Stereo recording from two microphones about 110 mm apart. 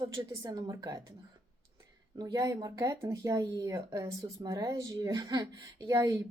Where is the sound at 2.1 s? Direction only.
35° right (ahead or behind).